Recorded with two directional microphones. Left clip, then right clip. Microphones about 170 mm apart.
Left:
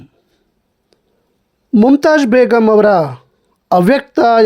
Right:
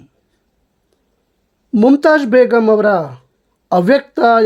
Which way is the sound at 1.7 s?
15° left (ahead or behind).